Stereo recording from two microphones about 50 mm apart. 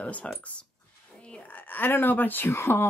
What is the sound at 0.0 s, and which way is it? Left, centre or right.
Speech, left.